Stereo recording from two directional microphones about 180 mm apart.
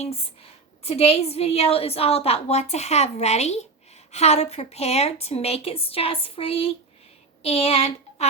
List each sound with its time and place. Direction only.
0.0 s a woman's voice: 35° left (ahead or behind)